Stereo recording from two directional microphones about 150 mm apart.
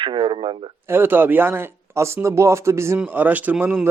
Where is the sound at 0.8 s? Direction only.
15° right (ahead or behind).